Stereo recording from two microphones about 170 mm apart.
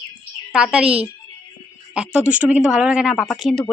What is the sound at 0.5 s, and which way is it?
Speech, 5° right (ahead or behind).